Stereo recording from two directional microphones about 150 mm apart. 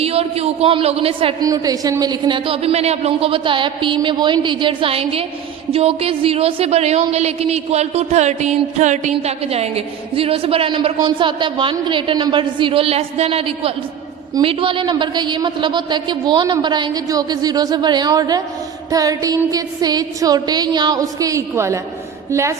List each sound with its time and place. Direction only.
0.0 s speech: 40° right (ahead or behind)
1.4 s a woman's voice: 25° right (ahead or behind)